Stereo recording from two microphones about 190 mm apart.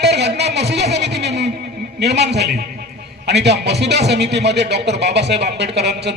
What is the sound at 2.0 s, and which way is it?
A man's voice, 60° right (ahead or behind).